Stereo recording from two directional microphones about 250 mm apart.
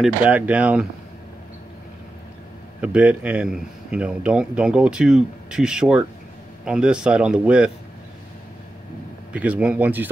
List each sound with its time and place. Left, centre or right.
0.0 s speech: centre
2.8 s speech: centre
9.3 s speech: centre